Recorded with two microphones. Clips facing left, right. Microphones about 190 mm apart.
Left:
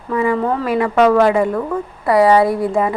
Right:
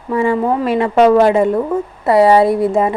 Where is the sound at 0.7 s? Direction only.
25° right (ahead or behind).